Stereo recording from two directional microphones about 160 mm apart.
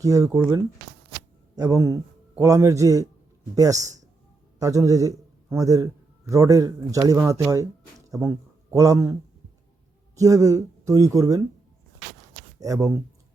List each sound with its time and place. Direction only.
0.0 s a man's voice: 20° right (ahead or behind)
10.2 s a man's voice: 20° right (ahead or behind)
12.5 s speech: 20° right (ahead or behind)